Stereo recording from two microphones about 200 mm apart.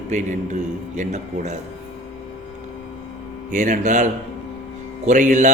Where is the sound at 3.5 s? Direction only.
40° right (ahead or behind).